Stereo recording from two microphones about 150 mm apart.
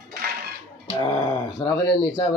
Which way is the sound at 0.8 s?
35° left (ahead or behind).